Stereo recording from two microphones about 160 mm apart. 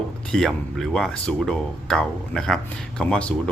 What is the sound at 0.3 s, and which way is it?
Speech, centre (ahead or behind).